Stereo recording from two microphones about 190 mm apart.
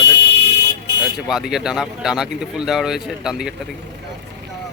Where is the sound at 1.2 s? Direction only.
5° right (ahead or behind).